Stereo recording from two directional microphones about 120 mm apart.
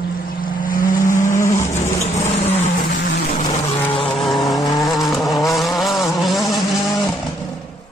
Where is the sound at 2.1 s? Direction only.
75° left (ahead or behind).